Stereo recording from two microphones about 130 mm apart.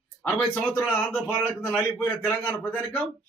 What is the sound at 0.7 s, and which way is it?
A man's voice, 15° left (ahead or behind).